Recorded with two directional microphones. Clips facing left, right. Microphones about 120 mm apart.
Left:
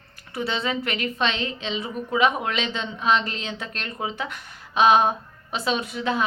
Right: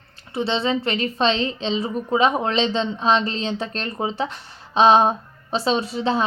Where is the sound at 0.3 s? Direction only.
25° right (ahead or behind).